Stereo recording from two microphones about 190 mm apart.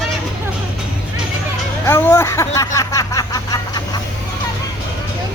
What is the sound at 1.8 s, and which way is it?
Speech, 10° left (ahead or behind).